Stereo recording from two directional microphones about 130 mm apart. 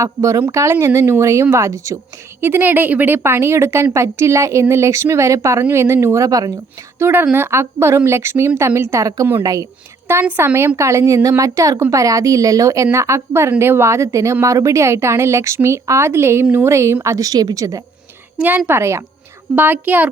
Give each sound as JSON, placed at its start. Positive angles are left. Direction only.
{"t": 0.0, "sound": "a woman's voice", "side_deg": -25}
{"t": 2.4, "sound": "a woman's voice", "side_deg": -15}
{"t": 7.0, "sound": "a woman's voice", "side_deg": -15}
{"t": 18.4, "sound": "a woman's voice", "side_deg": -15}